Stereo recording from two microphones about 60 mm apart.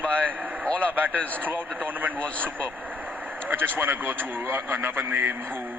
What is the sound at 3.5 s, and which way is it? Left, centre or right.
Speech, right.